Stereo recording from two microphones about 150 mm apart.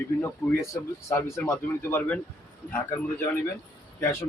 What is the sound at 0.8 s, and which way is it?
Speech, 15° left (ahead or behind).